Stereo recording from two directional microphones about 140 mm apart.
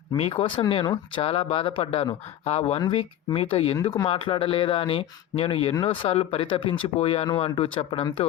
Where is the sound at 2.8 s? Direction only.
35° left (ahead or behind).